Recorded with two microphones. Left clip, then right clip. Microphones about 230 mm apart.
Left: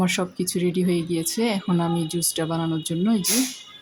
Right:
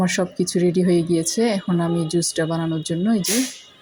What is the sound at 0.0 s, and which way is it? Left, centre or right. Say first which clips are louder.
Speech: right 3 dB; centre.